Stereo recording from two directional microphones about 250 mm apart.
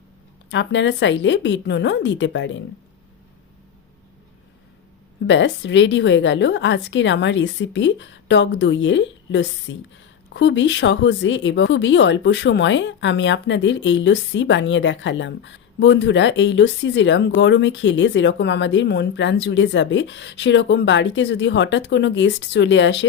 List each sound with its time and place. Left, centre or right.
0.5 s speech: left
5.2 s speech: left